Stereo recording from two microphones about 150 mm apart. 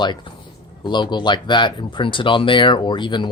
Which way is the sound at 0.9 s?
30° left (ahead or behind).